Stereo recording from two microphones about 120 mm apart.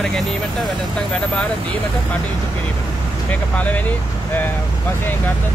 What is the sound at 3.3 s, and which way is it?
Speech, 10° left (ahead or behind).